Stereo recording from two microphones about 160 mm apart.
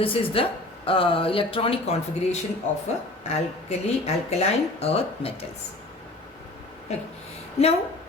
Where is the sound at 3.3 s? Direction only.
40° left (ahead or behind).